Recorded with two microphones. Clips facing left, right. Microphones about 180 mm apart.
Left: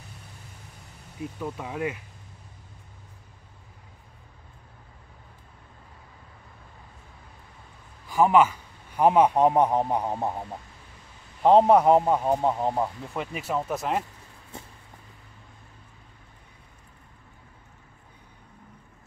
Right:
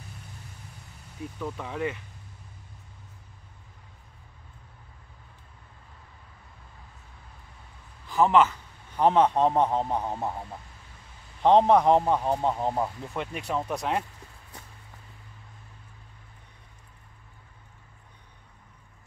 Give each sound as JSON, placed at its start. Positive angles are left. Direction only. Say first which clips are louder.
{"t": 1.4, "sound": "speech", "louder": "even", "side_deg": 10}
{"t": 8.1, "sound": "a man's voice", "louder": "left 1 dB", "side_deg": 10}
{"t": 11.4, "sound": "speech", "louder": "left 2 dB", "side_deg": 5}
{"t": 14.5, "sound": "a sound", "louder": "left 6 dB", "side_deg": 25}